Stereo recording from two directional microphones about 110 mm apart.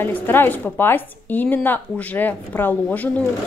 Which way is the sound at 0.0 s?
20° left (ahead or behind).